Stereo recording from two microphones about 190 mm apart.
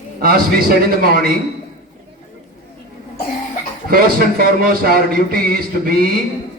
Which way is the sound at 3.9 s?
50° right (ahead or behind).